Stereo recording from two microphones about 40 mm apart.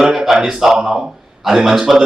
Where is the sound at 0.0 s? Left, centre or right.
Centre.